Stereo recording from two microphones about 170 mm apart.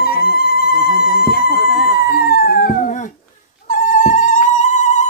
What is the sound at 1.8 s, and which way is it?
Dog, 65° left (ahead or behind).